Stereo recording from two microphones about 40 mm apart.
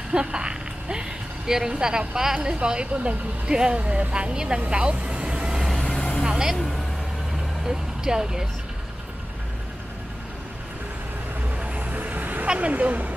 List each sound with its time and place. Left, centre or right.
0.1 s a woman's voice: right
4.1 s speech: right
4.6 s vehicle: right
5.8 s vehicle: centre
6.2 s vehicle: centre
6.5 s speech: centre
7.6 s speech: centre
11.6 s vehicle: right
12.5 s speech: right